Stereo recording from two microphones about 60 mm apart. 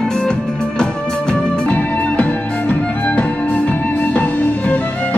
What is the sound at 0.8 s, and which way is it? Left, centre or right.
Music, centre.